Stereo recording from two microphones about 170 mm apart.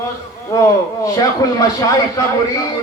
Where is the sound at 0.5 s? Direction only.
20° left (ahead or behind).